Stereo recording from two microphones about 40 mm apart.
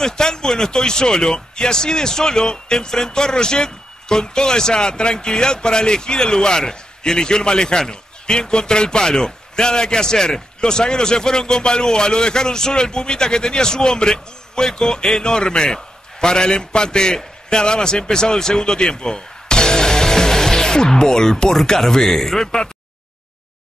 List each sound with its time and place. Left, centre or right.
0.0 s speech: centre